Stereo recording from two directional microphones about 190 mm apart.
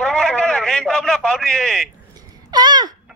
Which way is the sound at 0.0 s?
5° left (ahead or behind).